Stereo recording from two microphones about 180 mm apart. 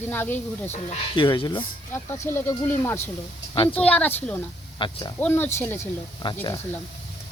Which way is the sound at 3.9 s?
10° left (ahead or behind).